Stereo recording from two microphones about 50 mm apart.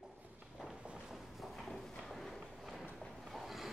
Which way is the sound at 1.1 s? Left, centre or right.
Centre.